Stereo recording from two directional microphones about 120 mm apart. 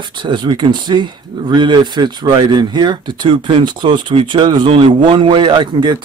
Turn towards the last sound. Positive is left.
turn(degrees=-40)  # may be behind; listen again after turning